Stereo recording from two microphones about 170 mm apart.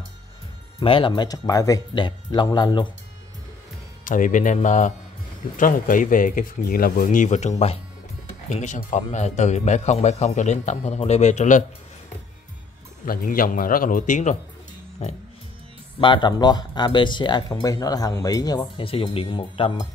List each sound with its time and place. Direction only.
0.7 s speech: 30° left (ahead or behind)
4.0 s a man's voice: 50° left (ahead or behind)
13.0 s speech: 55° left (ahead or behind)
16.0 s speech: 25° left (ahead or behind)